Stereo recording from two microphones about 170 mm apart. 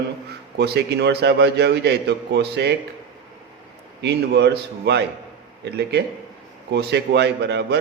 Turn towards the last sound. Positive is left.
turn(degrees=-80)